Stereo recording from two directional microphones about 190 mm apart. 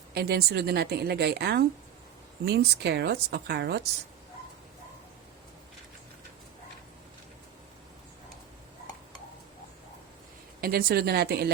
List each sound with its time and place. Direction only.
0.1 s a woman's voice: 55° right (ahead or behind)
10.6 s a woman's voice: 55° right (ahead or behind)